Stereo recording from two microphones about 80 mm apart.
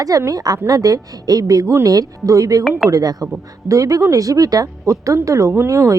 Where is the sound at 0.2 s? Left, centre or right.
Right.